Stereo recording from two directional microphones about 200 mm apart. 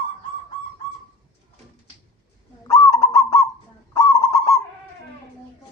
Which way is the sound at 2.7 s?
15° left (ahead or behind).